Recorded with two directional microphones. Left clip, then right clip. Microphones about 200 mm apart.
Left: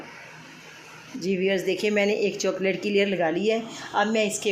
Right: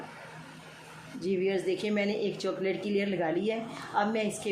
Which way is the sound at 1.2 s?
40° left (ahead or behind).